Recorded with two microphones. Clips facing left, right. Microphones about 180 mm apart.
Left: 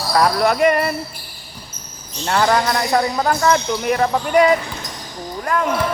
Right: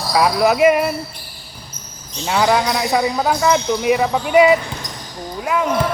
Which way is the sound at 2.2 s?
5° right (ahead or behind).